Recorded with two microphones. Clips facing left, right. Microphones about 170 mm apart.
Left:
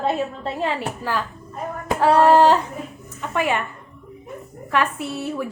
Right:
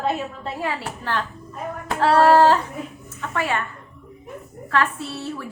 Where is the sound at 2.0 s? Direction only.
15° left (ahead or behind).